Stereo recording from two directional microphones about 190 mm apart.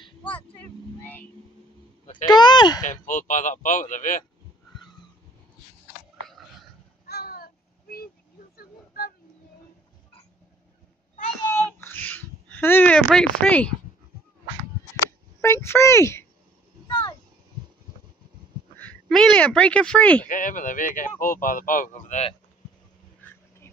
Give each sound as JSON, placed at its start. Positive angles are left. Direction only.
{"t": 0.0, "sound": "vehicle", "side_deg": 25}
{"t": 0.6, "sound": "vehicle", "side_deg": 10}
{"t": 2.2, "sound": "speech", "side_deg": 25}
{"t": 2.8, "sound": "speech", "side_deg": 40}
{"t": 7.1, "sound": "a sound", "side_deg": 55}
{"t": 11.4, "sound": "a sound", "side_deg": 10}
{"t": 15.0, "sound": "a sound", "side_deg": 15}
{"t": 18.8, "sound": "speech", "side_deg": 5}
{"t": 20.2, "sound": "speech", "side_deg": 45}